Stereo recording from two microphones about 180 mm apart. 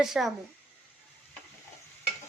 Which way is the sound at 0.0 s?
Centre (ahead or behind).